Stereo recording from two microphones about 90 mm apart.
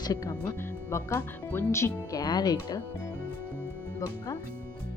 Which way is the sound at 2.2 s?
45° left (ahead or behind).